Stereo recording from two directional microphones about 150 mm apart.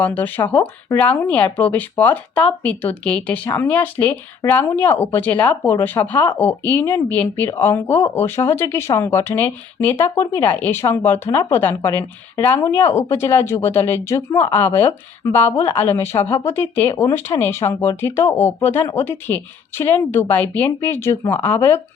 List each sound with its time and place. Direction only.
0.0 s speech: 10° left (ahead or behind)